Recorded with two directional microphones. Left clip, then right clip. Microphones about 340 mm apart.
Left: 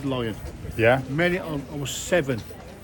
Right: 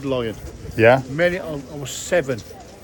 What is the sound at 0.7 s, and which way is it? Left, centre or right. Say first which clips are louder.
Speech: right 6 dB; right.